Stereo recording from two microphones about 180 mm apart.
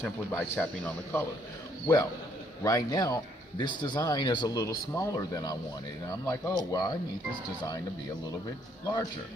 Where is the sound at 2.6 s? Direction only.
20° left (ahead or behind).